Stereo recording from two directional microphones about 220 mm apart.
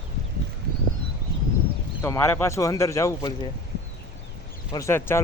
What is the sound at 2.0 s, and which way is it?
Speech, 10° left (ahead or behind).